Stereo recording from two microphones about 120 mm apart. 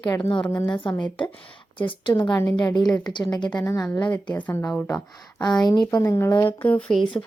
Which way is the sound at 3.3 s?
35° left (ahead or behind).